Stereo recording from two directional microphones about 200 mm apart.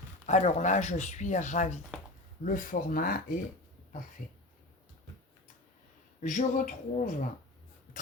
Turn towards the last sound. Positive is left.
turn(degrees=40)  # may be behind; listen again after turning